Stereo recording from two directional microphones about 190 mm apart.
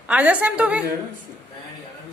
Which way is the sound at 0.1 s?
5° right (ahead or behind).